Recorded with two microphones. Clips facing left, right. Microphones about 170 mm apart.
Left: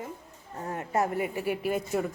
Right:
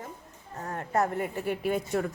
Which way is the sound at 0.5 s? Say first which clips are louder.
Even; 10° left (ahead or behind).